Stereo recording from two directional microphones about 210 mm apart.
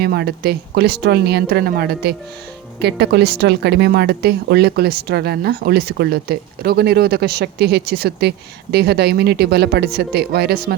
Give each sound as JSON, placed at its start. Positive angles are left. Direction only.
{"t": 0.0, "sound": "a woman's voice", "side_deg": -50}